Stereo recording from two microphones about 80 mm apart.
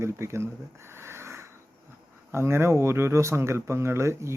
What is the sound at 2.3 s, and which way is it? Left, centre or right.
Speech, right.